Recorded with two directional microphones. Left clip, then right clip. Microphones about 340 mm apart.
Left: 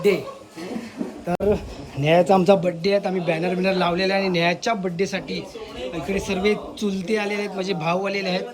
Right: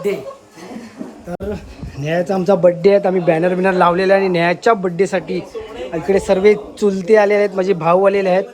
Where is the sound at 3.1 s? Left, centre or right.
Right.